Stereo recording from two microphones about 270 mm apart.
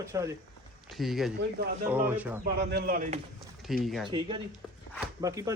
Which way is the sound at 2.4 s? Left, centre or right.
Right.